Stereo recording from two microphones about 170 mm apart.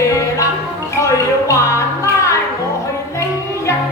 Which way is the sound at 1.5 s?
15° left (ahead or behind).